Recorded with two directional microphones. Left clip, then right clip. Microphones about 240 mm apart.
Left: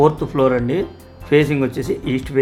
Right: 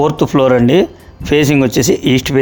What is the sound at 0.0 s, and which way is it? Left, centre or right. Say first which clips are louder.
A man's voice: right 3 dB; right.